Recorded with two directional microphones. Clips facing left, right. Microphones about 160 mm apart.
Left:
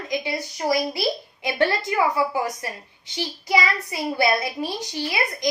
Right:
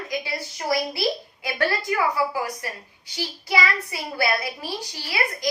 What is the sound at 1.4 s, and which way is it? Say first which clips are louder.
A woman's voice: left 4 dB; 20° left (ahead or behind).